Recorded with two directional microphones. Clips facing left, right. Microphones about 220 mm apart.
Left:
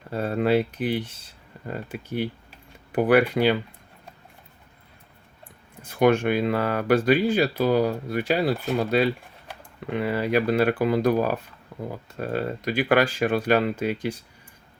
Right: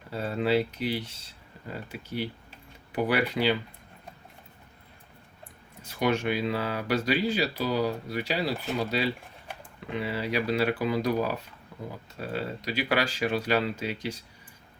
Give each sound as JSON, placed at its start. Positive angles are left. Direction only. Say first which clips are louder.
{"t": 0.1, "sound": "speech", "louder": "left 4 dB", "side_deg": 50}
{"t": 5.8, "sound": "speech", "louder": "left 7 dB", "side_deg": 50}